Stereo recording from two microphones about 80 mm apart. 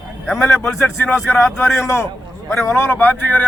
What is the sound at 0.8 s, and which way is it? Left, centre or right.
A man's voice, left.